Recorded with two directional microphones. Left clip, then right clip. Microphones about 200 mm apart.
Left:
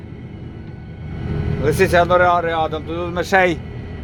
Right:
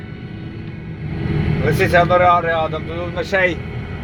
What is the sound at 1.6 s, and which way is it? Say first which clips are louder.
Speech: even; 20° left (ahead or behind).